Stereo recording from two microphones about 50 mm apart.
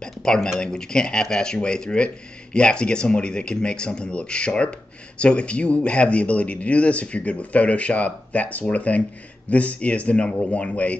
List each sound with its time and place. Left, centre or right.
0.0 s a man's voice: centre